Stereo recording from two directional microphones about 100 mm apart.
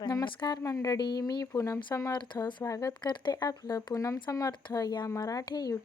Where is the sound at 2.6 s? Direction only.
35° left (ahead or behind).